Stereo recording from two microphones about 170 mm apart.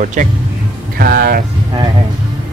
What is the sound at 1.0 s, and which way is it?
Speech, 65° right (ahead or behind).